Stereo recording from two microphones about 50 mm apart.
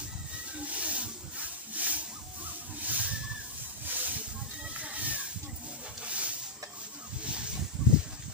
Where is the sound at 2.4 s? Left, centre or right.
Right.